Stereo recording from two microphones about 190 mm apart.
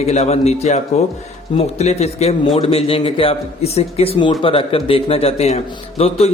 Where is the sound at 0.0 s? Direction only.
35° left (ahead or behind).